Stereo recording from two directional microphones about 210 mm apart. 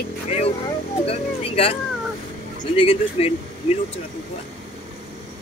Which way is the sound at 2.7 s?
25° left (ahead or behind).